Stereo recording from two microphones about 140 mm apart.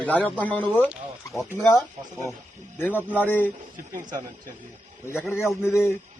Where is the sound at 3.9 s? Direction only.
70° right (ahead or behind).